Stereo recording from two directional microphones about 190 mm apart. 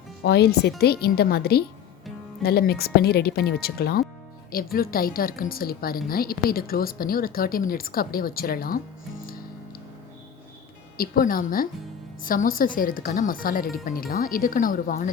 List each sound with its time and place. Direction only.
0.3 s a woman's voice: 60° left (ahead or behind)
10.9 s a woman's voice: 50° left (ahead or behind)